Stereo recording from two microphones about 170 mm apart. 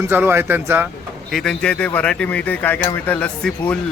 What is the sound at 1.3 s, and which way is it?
Cutlery, centre (ahead or behind).